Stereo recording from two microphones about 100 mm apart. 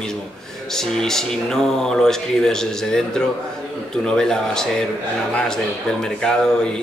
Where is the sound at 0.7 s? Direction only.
5° left (ahead or behind).